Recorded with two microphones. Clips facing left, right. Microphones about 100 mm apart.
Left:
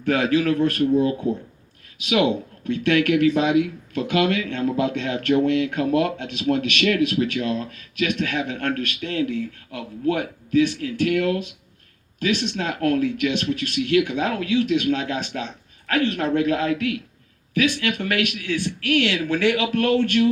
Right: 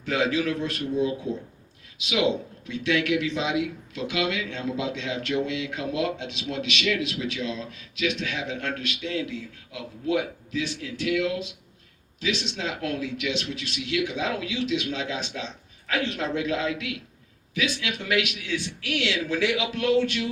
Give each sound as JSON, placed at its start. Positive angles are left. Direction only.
{"t": 0.0, "sound": "speech", "side_deg": 55}